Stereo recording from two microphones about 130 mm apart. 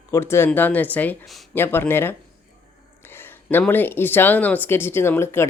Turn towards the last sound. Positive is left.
turn(degrees=20)  # may be behind; listen again after turning